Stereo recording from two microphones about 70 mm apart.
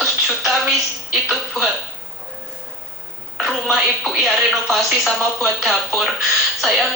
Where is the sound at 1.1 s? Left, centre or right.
Centre.